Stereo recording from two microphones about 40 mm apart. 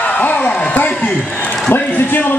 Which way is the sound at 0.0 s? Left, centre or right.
Left.